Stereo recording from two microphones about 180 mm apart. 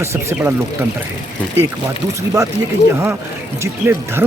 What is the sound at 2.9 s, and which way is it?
Speech, 15° right (ahead or behind).